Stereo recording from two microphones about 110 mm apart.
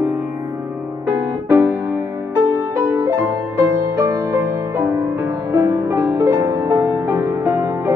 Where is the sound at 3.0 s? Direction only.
25° right (ahead or behind).